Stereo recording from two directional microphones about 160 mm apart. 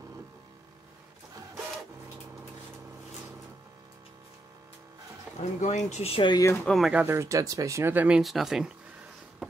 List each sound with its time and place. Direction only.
5.4 s speech: 45° left (ahead or behind)
6.6 s speech: centre (ahead or behind)